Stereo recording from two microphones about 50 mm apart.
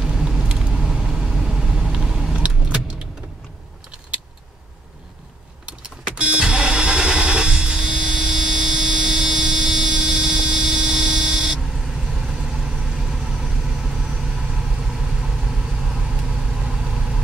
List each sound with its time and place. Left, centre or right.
0.0 s vehicle: centre
2.3 s vehicle: right
5.7 s vehicle: right